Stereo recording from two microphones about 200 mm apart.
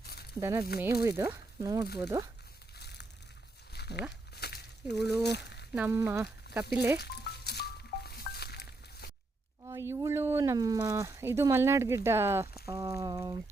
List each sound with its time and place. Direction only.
0.0 s a sound: 50° left (ahead or behind)
0.3 s speech: 15° right (ahead or behind)
2.7 s a sound: 55° left (ahead or behind)
5.2 s speech: 55° left (ahead or behind)
5.7 s speech: 10° right (ahead or behind)
7.0 s music: 55° left (ahead or behind)
9.6 s speech: 15° right (ahead or behind)